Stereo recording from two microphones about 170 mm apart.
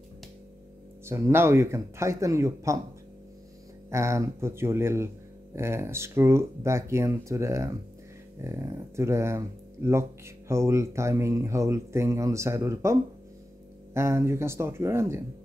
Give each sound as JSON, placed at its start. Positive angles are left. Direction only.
{"t": 1.0, "sound": "speech", "side_deg": -15}
{"t": 3.9, "sound": "speech", "side_deg": -15}